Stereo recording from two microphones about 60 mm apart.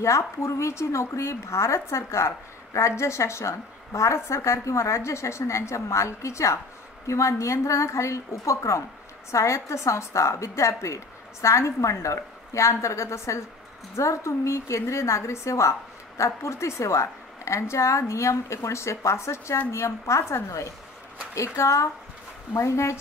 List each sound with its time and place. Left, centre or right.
0.0 s a woman's voice: left